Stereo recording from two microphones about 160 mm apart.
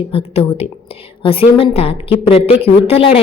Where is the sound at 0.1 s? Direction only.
40° left (ahead or behind).